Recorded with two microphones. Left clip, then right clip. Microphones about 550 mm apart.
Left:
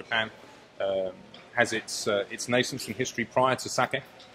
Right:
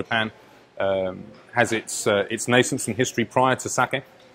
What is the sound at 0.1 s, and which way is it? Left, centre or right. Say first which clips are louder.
A man's voice: right 3 dB; right.